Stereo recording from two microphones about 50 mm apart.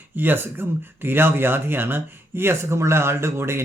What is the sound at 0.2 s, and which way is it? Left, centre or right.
A man's voice, right.